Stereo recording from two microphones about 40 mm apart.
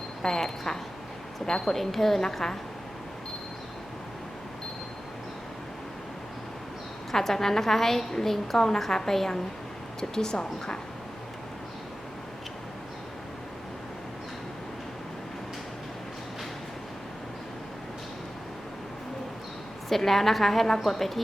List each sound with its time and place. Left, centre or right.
0.2 s a woman's voice: centre
7.1 s a woman's voice: centre
19.9 s a woman's voice: centre